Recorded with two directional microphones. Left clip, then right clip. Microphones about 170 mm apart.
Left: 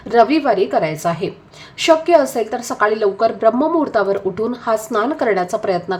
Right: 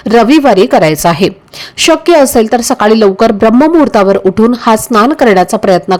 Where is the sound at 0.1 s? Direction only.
50° right (ahead or behind).